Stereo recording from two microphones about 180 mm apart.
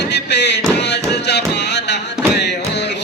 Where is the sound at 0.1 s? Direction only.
70° left (ahead or behind).